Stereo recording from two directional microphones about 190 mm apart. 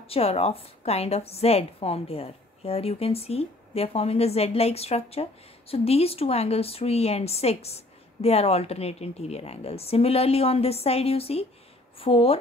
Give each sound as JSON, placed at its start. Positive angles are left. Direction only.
{"t": 0.0, "sound": "a woman's voice", "side_deg": 30}